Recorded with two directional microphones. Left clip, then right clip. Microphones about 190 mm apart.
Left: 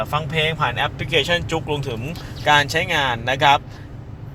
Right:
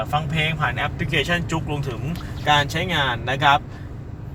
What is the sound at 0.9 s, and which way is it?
Speech, 60° left (ahead or behind).